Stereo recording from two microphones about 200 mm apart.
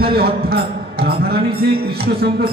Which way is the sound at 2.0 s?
50° right (ahead or behind).